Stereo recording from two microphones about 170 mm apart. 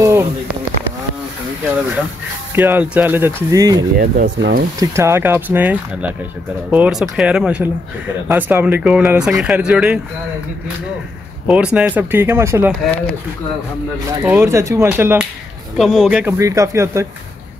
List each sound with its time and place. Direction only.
0.0 s a sound: 15° right (ahead or behind)
2.5 s speech: 10° right (ahead or behind)
4.0 s speech: 75° right (ahead or behind)
4.7 s speech: 15° right (ahead or behind)
11.4 s speech: 5° right (ahead or behind)
14.2 s speech: 15° right (ahead or behind)
15.8 s speech: centre (ahead or behind)
16.3 s speech: 20° right (ahead or behind)